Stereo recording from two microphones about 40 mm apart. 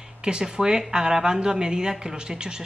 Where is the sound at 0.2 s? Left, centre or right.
Centre.